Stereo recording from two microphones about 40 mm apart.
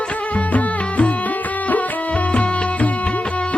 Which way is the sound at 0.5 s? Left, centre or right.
Left.